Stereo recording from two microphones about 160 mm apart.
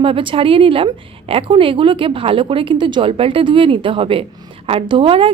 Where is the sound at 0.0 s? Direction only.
35° right (ahead or behind).